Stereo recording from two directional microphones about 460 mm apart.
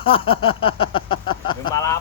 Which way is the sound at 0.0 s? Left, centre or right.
Centre.